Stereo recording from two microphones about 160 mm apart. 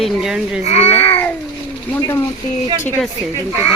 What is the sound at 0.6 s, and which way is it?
Speech, 40° left (ahead or behind).